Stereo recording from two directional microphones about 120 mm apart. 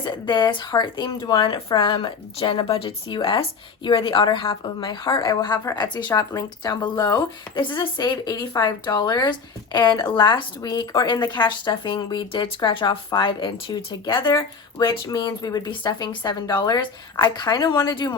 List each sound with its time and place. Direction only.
0.0 s speech: 40° left (ahead or behind)
7.6 s speech: 40° left (ahead or behind)